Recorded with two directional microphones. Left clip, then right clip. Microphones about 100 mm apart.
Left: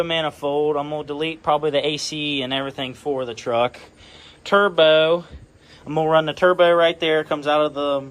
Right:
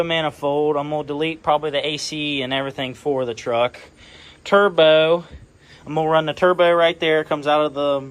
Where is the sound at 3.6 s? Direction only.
55° left (ahead or behind).